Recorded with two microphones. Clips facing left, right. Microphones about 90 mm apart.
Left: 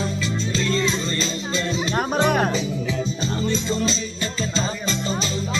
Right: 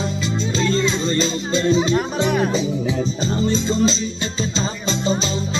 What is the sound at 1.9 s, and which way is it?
Speech, 40° left (ahead or behind).